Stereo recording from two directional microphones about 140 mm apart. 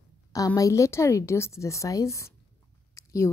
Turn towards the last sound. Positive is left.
turn(degrees=20)  # may be behind; listen again after turning